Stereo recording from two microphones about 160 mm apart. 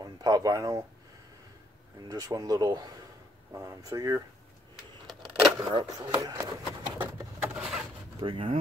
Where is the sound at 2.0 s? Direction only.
25° right (ahead or behind).